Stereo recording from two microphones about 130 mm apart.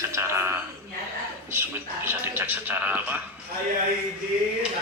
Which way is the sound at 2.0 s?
15° right (ahead or behind).